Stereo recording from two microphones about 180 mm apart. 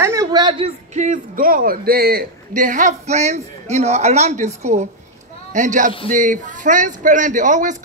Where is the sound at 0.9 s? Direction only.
45° right (ahead or behind).